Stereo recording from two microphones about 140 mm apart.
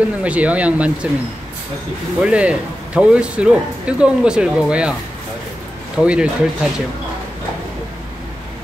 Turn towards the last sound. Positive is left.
turn(degrees=-5)  # may be behind; listen again after turning